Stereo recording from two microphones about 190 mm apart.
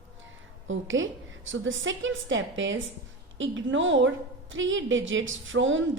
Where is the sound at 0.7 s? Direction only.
90° right.